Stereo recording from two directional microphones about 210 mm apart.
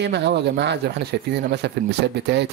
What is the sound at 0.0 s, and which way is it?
Speech, 55° right (ahead or behind).